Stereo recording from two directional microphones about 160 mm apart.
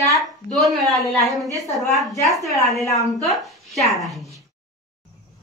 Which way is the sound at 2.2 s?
Centre (ahead or behind).